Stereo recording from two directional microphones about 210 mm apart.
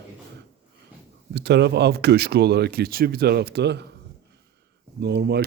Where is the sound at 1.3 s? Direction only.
55° right (ahead or behind).